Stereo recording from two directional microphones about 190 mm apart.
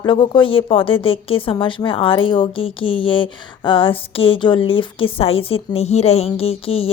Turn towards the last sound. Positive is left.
turn(degrees=30)  # may be behind; listen again after turning